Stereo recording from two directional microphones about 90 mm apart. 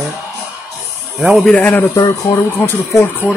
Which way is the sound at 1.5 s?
20° left (ahead or behind).